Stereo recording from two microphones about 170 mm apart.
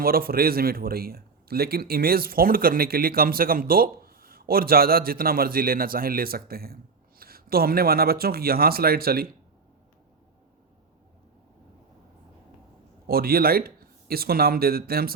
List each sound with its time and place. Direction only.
0.0 s a man's voice: 60° right (ahead or behind)
13.1 s speech: 60° right (ahead or behind)